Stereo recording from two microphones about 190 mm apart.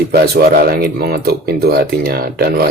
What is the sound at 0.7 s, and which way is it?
Speech, 55° right (ahead or behind).